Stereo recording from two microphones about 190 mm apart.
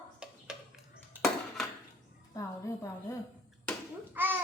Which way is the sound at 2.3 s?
15° left (ahead or behind).